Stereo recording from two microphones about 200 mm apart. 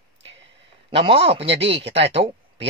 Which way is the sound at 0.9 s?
30° right (ahead or behind).